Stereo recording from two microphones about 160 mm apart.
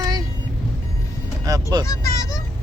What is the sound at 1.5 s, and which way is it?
Speech, 20° right (ahead or behind).